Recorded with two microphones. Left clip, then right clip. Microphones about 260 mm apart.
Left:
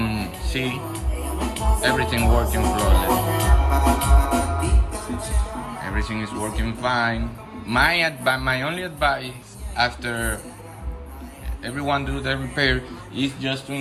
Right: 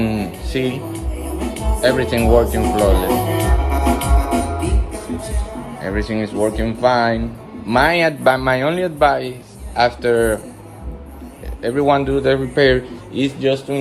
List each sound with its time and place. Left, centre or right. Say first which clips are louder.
0.0 s music: right 5 dB; centre
4.9 s speech: right 3 dB; centre
11.6 s speech: right 9 dB; centre